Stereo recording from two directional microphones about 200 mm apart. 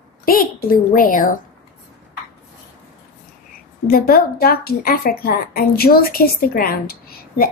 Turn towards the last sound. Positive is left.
turn(degrees=50)  # may be behind; listen again after turning